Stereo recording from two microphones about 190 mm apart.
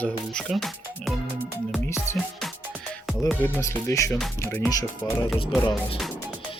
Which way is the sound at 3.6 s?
15° left (ahead or behind).